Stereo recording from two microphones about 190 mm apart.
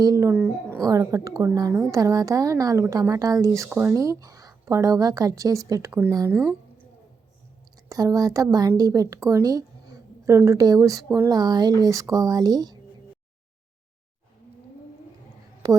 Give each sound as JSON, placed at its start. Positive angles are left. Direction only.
{"t": 0.0, "sound": "a woman's voice", "side_deg": -15}
{"t": 6.3, "sound": "a sound", "side_deg": 0}
{"t": 7.9, "sound": "a woman's voice", "side_deg": -20}
{"t": 15.6, "sound": "a woman's voice", "side_deg": -20}